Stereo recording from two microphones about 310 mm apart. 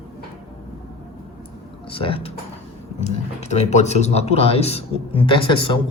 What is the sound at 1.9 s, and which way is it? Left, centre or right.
Speech, centre.